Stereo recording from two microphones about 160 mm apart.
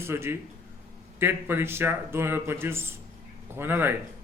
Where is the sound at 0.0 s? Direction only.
15° right (ahead or behind).